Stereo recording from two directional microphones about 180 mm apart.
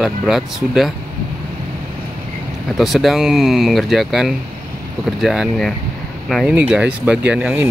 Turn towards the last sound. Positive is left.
turn(degrees=-5)  # may be behind; listen again after turning